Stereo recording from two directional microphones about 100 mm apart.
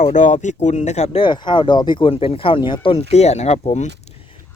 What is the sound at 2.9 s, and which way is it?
Speech, 90° left.